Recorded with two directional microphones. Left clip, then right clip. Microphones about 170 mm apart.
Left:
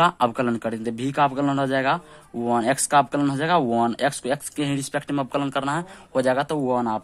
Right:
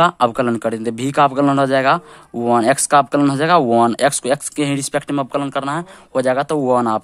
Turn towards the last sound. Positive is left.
turn(degrees=-45)  # may be behind; listen again after turning